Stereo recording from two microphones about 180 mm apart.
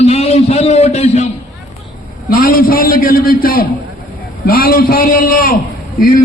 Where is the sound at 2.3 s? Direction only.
55° left (ahead or behind).